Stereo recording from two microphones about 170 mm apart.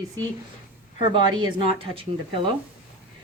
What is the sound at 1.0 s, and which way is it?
Speech, 30° right (ahead or behind).